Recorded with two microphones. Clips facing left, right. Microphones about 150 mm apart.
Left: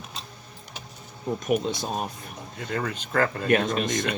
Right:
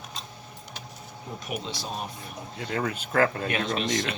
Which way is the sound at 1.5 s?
50° left (ahead or behind).